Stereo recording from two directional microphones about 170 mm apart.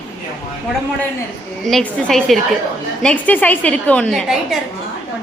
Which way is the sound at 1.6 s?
5° left (ahead or behind).